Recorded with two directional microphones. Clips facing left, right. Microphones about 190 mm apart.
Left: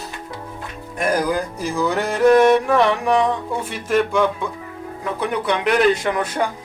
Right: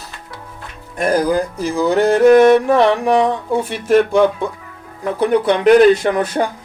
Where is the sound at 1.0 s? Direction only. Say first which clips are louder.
Right 4 dB; 30° right (ahead or behind).